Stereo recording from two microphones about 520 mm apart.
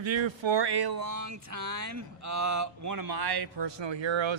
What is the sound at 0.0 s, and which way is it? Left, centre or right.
A man's voice, right.